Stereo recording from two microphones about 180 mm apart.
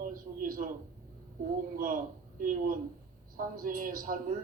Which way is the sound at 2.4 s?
50° right (ahead or behind).